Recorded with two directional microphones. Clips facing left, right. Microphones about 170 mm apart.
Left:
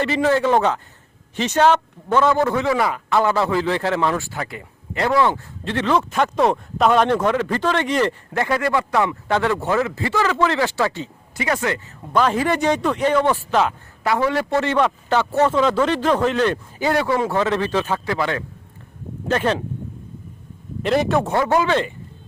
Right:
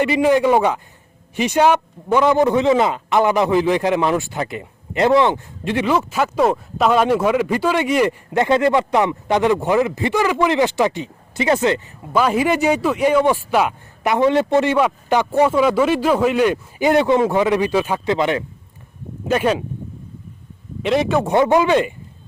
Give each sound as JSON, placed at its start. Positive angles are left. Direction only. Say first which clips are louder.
{"t": 0.0, "sound": "a man's voice", "louder": "right 3 dB", "side_deg": -15}
{"t": 12.1, "sound": "a man's voice", "louder": "right 2 dB", "side_deg": -10}
{"t": 20.8, "sound": "speech", "louder": "right 1 dB", "side_deg": 0}
{"t": 21.2, "sound": "a man's voice", "louder": "right 4 dB", "side_deg": -20}